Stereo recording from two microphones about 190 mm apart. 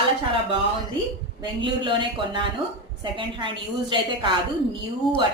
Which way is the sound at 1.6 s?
25° right (ahead or behind).